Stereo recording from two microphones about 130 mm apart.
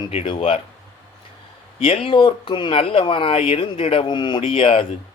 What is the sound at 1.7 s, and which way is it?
A man's voice, 45° left (ahead or behind).